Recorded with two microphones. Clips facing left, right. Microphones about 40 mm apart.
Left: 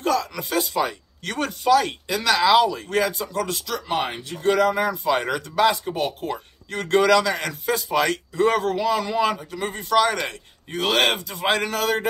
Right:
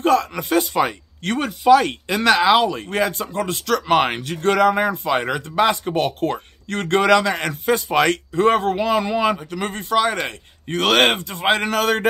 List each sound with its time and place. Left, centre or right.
0.0 s a man's voice: right
3.6 s speech: right
4.6 s a man's voice: right
5.9 s a man's voice: right
9.4 s speech: right
9.8 s speech: centre
10.7 s speech: right
11.1 s a man's voice: right
11.4 s a man's voice: right
11.7 s speech: right